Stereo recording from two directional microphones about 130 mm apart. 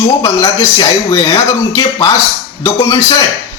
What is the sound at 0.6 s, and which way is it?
A man's voice, 30° left (ahead or behind).